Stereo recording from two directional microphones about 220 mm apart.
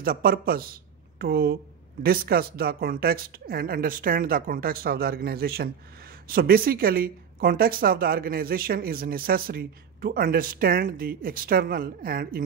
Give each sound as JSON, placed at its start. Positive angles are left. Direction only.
{"t": 0.0, "sound": "speech", "side_deg": -40}